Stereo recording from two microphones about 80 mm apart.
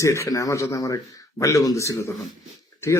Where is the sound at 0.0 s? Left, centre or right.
Left.